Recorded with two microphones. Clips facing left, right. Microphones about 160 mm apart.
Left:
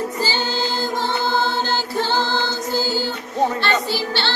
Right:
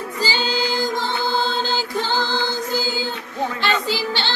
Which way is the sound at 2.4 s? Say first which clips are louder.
Left 1 dB; 15° right (ahead or behind).